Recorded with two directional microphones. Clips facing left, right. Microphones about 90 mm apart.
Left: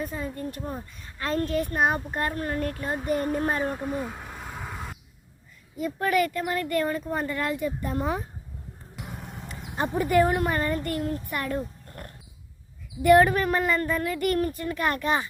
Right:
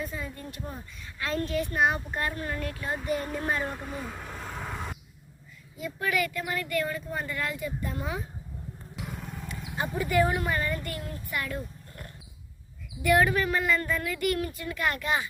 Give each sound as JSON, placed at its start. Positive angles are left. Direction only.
{"t": 0.0, "sound": "speech", "side_deg": 40}
{"t": 3.6, "sound": "vehicle", "side_deg": 15}
{"t": 5.7, "sound": "speech", "side_deg": 45}
{"t": 9.0, "sound": "vehicle", "side_deg": 20}
{"t": 10.0, "sound": "speech", "side_deg": 50}